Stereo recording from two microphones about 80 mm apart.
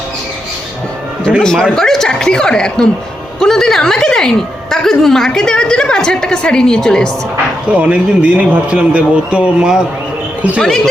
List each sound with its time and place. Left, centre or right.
1.4 s a woman's voice: centre
7.7 s a man's voice: centre